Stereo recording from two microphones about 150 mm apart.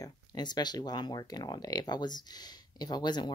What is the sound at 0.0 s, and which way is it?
Speech, 30° left (ahead or behind).